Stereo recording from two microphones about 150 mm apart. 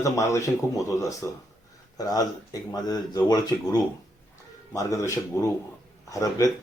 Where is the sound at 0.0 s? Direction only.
20° left (ahead or behind).